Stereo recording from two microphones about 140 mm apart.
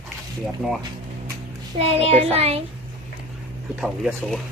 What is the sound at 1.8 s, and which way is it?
Child singing, 45° right (ahead or behind).